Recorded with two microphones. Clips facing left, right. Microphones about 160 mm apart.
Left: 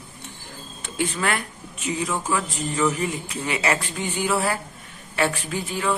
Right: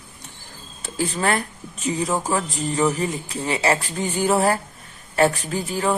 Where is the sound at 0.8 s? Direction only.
35° right (ahead or behind).